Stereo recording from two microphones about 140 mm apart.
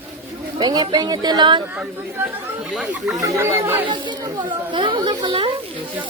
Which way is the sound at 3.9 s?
35° right (ahead or behind).